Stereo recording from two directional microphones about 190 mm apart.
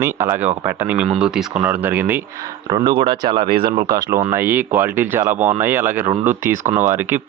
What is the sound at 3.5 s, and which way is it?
Speech, 50° right (ahead or behind).